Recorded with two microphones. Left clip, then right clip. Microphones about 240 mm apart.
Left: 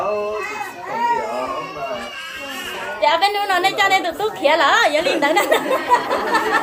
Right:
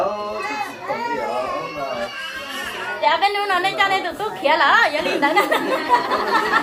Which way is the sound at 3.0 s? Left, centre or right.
Left.